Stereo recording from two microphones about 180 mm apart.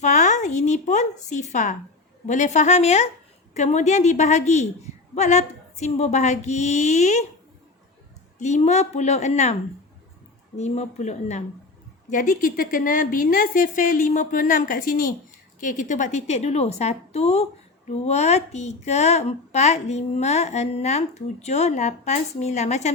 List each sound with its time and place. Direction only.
0.0 s a woman's voice: 40° left (ahead or behind)
8.4 s a woman's voice: 40° left (ahead or behind)
10.6 s a woman's voice: 40° left (ahead or behind)